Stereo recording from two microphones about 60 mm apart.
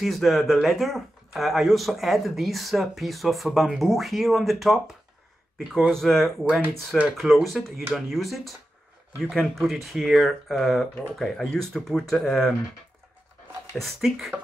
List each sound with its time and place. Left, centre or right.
0.0 s speech: centre
13.7 s speech: centre